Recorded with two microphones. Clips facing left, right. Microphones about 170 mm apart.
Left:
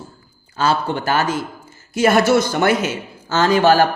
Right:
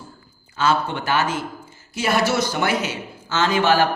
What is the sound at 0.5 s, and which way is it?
A man's voice, 35° left (ahead or behind).